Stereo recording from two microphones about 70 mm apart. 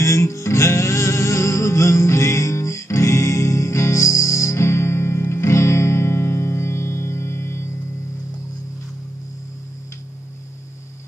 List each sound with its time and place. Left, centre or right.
0.0 s music: left